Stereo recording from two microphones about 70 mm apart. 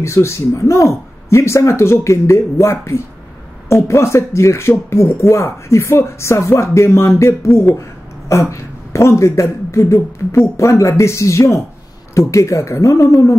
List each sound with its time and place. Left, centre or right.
0.0 s speech: left